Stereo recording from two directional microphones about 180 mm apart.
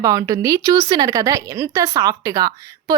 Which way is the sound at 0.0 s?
20° right (ahead or behind).